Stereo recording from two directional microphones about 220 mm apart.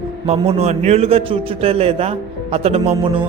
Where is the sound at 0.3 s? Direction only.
25° right (ahead or behind).